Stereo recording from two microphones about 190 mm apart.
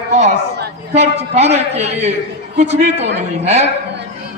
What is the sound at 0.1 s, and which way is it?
Chatter, 35° right (ahead or behind).